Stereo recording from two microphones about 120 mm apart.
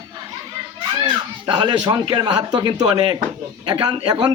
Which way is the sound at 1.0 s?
40° right (ahead or behind).